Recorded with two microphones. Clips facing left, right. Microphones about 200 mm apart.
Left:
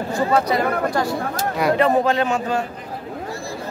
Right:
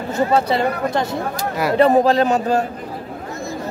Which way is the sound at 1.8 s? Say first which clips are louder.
Right 7 dB; 35° right (ahead or behind).